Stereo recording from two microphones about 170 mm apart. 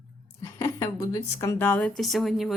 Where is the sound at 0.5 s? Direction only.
15° left (ahead or behind).